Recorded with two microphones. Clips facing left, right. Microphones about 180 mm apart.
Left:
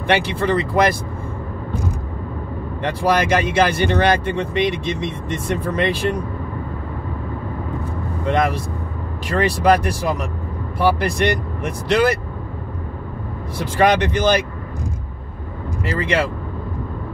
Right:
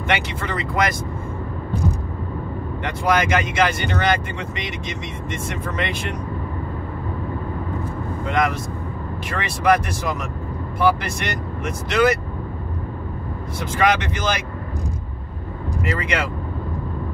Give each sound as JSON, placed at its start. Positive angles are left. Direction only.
{"t": 0.0, "sound": "speech", "side_deg": 30}
{"t": 2.8, "sound": "speech", "side_deg": 35}
{"t": 8.3, "sound": "speech", "side_deg": 30}
{"t": 13.6, "sound": "speech", "side_deg": 35}
{"t": 15.8, "sound": "speech", "side_deg": 30}